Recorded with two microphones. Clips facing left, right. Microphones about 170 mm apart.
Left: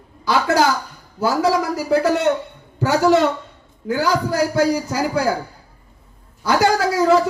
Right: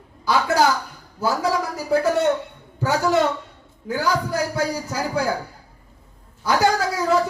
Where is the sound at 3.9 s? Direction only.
90° left.